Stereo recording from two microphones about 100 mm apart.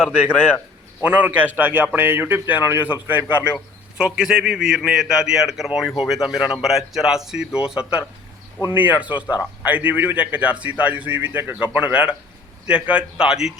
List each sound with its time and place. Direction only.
1.0 s a man's voice: 15° right (ahead or behind)